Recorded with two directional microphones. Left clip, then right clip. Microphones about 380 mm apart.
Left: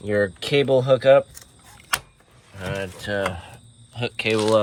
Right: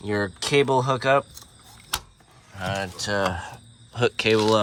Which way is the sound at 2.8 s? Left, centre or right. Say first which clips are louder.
Even; right.